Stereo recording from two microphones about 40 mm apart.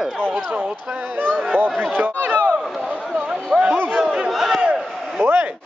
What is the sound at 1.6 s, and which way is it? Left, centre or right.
Speech, right.